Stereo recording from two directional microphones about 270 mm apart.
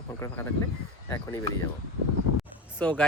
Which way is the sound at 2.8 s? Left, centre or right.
Centre.